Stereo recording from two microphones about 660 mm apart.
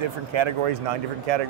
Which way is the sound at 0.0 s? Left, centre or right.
Right.